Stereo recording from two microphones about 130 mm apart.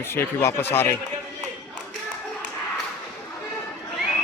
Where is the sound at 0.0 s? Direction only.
20° left (ahead or behind).